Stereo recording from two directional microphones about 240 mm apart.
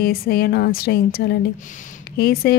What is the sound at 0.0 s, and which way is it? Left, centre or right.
A woman's voice, left.